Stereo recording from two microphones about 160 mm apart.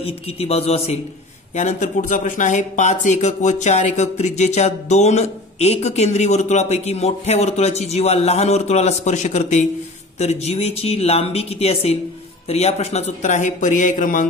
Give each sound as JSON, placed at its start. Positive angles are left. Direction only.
{"t": 0.0, "sound": "speech", "side_deg": 40}